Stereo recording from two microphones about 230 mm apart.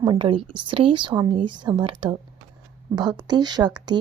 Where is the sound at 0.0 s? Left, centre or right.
Centre.